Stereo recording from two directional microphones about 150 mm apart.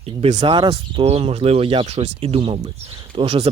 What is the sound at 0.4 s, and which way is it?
Speech, 35° right (ahead or behind).